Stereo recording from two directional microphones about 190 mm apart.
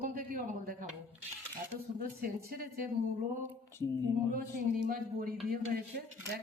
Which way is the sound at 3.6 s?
15° left (ahead or behind).